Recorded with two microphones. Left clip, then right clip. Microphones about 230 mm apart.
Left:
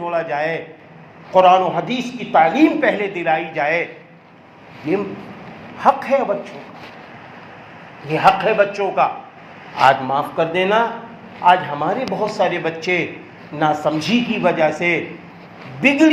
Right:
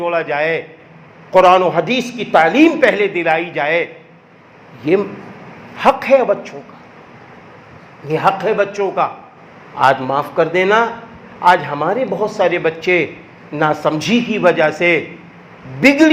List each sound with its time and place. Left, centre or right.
0.0 s a man's voice: right
5.7 s a man's voice: right
8.0 s a man's voice: right